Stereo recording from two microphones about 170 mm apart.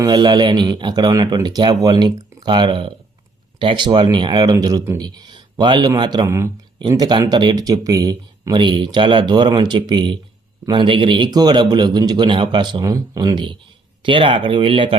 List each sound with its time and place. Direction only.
0.0 s speech: 25° right (ahead or behind)